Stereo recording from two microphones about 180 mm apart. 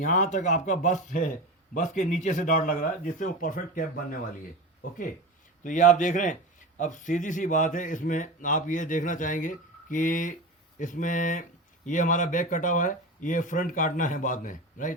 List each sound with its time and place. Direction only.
0.0 s speech: 45° left (ahead or behind)